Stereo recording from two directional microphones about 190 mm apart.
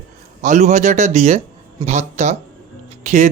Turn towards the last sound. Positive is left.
turn(degrees=-40)  # may be behind; listen again after turning